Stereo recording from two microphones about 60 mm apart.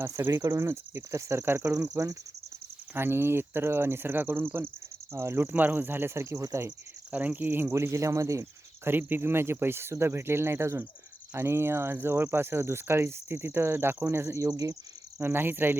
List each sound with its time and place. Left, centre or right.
0.3 s speech: right
2.9 s speech: right
5.1 s speech: right
5.5 s speech: right
7.1 s speech: right
7.7 s speech: right
8.8 s speech: right
14.3 s speech: right
15.2 s speech: right